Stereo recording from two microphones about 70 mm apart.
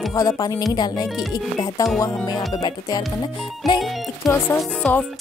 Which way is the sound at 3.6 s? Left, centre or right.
Centre.